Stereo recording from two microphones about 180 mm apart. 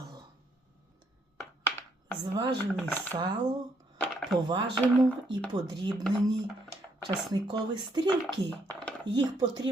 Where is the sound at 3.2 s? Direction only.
25° right (ahead or behind).